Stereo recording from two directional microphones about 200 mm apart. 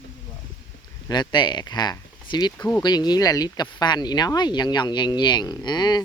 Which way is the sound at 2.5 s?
10° left (ahead or behind).